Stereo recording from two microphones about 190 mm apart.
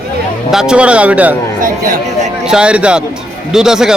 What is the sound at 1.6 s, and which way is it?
Speech, 45° right (ahead or behind).